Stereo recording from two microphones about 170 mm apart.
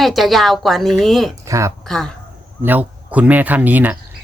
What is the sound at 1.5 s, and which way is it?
Speech, 15° right (ahead or behind).